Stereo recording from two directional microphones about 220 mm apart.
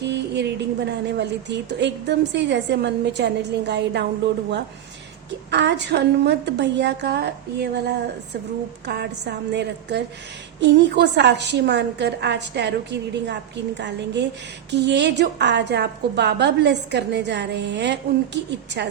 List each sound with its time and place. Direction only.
0.0 s a woman's voice: 50° right (ahead or behind)
5.5 s a woman's voice: 50° right (ahead or behind)